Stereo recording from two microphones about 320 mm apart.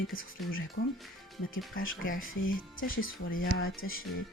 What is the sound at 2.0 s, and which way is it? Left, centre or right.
Speech, left.